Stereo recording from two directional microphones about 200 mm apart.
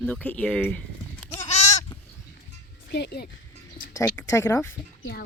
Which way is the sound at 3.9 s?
15° left (ahead or behind).